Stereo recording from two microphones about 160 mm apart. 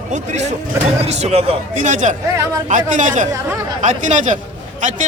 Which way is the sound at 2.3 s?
20° right (ahead or behind).